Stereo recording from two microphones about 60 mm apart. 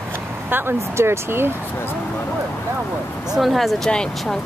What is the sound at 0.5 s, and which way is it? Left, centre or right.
Speech, right.